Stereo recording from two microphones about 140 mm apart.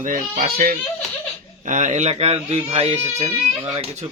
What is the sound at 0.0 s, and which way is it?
Speech, 70° right (ahead or behind).